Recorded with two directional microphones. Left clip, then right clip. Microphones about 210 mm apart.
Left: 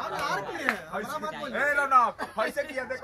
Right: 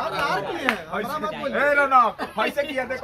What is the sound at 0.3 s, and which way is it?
Speech, 45° left (ahead or behind).